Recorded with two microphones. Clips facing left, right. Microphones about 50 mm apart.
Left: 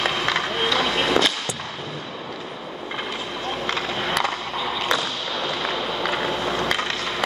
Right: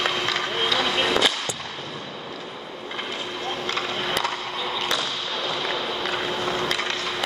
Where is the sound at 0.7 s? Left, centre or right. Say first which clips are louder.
Left 1 dB; centre.